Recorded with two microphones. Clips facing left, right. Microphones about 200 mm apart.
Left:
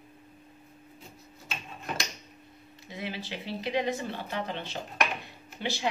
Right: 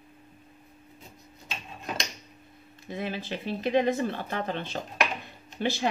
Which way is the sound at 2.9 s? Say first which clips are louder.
Right 4 dB; 50° right (ahead or behind).